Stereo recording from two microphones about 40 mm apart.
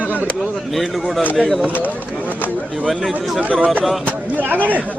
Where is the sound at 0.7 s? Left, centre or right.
Centre.